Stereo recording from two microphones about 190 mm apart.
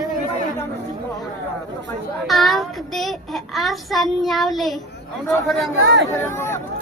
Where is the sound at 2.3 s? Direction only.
Centre (ahead or behind).